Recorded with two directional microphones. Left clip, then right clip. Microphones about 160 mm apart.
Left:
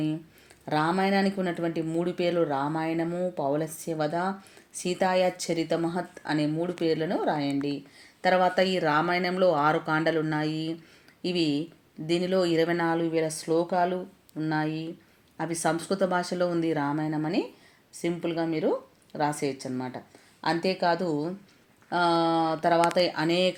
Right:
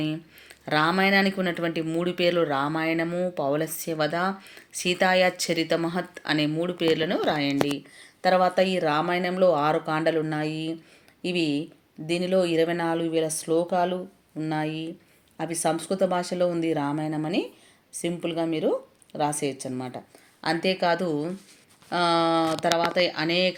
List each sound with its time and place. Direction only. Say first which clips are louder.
0.0 s speech: right 1 dB; 10° right (ahead or behind)